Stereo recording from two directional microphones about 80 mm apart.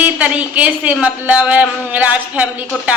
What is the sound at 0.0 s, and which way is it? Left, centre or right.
A woman's voice, centre.